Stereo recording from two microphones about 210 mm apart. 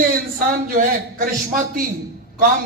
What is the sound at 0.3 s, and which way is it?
A man's voice, 40° right (ahead or behind).